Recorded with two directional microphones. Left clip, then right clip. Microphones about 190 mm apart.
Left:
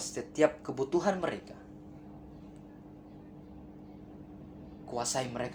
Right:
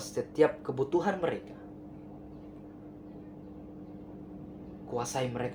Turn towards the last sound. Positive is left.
turn(degrees=25)  # may be behind; listen again after turning